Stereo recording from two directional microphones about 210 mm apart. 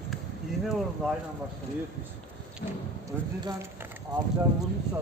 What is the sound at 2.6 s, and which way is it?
Speech, 45° left (ahead or behind).